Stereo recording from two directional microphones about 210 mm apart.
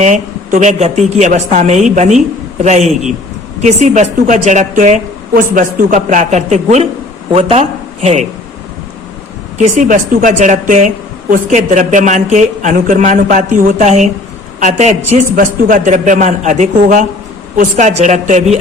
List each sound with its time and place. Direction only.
0.0 s a woman's voice: 35° right (ahead or behind)
9.6 s a woman's voice: 40° right (ahead or behind)